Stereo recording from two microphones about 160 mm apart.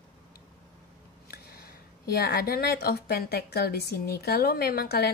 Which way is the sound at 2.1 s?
80° left.